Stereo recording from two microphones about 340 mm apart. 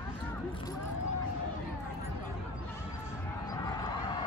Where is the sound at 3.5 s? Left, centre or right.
Centre.